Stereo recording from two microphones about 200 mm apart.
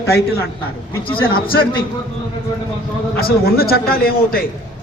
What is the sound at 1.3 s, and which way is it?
Speech, 45° left (ahead or behind).